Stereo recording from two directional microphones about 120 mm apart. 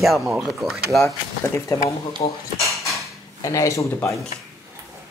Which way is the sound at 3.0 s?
25° left (ahead or behind).